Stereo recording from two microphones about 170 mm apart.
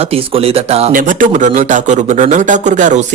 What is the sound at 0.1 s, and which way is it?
Speech, 35° right (ahead or behind).